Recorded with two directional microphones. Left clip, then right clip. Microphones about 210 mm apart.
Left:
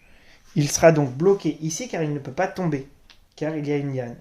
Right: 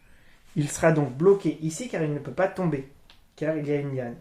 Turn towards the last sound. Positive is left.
turn(degrees=35)  # may be behind; listen again after turning